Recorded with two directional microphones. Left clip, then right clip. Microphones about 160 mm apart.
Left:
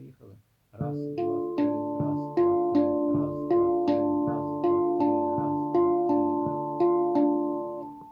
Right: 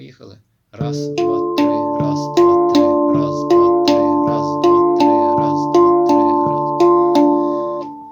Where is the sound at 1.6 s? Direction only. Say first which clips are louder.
Right 12 dB; 15° right (ahead or behind).